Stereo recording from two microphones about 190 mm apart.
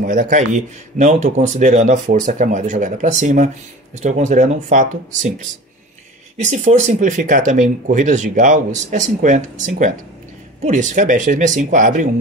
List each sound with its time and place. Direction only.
0.0 s speech: 45° right (ahead or behind)